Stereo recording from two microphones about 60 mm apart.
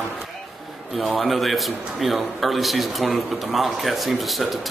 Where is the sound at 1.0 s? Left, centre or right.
Centre.